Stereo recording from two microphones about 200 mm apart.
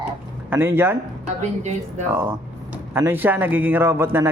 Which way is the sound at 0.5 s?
10° right (ahead or behind).